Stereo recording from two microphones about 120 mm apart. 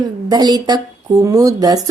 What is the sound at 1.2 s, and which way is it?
Speech, 30° right (ahead or behind).